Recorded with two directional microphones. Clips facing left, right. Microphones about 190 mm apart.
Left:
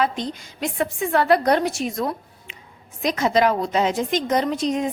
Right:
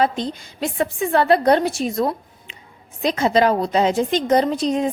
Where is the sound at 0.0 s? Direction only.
30° right (ahead or behind).